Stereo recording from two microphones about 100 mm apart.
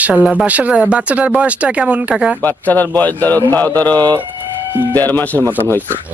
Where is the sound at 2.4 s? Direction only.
20° left (ahead or behind).